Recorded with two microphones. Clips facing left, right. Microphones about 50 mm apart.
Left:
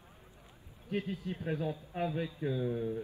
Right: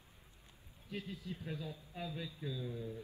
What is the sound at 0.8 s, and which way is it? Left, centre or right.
A man's voice, left.